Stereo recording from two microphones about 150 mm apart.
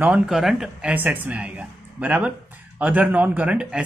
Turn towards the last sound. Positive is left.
turn(degrees=-5)  # may be behind; listen again after turning